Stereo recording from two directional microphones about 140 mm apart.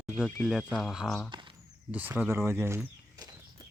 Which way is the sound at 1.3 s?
35° right (ahead or behind).